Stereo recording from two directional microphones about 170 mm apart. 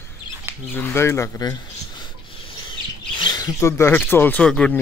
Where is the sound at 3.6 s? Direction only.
15° left (ahead or behind).